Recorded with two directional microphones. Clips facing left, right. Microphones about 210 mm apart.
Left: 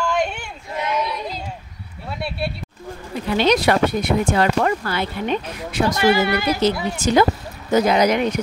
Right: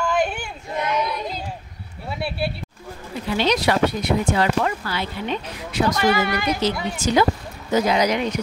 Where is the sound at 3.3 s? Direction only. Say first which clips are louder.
Left 3 dB; 55° left (ahead or behind).